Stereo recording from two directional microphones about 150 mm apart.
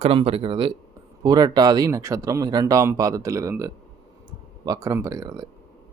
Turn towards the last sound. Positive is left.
turn(degrees=-25)  # may be behind; listen again after turning